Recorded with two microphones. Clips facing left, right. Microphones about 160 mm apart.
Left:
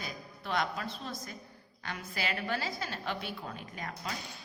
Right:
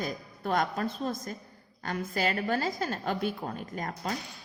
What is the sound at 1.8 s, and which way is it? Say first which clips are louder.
A woman's voice: right 7 dB; 45° right (ahead or behind).